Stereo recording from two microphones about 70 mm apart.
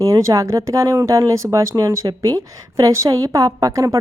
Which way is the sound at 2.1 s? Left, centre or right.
Right.